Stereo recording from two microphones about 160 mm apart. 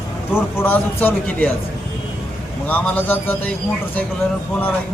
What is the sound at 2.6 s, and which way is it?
Speech, 10° left (ahead or behind).